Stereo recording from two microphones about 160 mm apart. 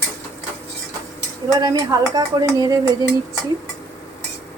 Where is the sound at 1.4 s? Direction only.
25° right (ahead or behind).